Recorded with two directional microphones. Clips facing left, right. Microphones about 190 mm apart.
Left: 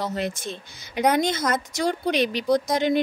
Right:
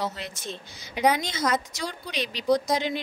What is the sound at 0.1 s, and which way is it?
A woman's voice, 50° left (ahead or behind).